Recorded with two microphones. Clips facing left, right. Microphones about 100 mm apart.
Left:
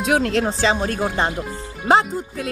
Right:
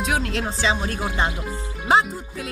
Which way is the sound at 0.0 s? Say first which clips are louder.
Left 6 dB; 50° left (ahead or behind).